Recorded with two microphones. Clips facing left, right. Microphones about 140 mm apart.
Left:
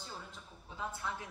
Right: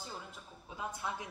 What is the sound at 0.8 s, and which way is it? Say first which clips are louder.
Speech: right 1 dB; 15° right (ahead or behind).